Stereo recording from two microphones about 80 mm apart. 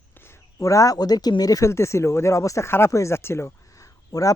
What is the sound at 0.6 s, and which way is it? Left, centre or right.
Speech, left.